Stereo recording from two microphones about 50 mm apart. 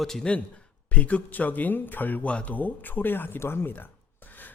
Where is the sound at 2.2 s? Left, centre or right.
Left.